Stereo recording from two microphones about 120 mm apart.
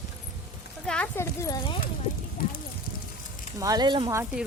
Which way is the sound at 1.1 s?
25° left (ahead or behind).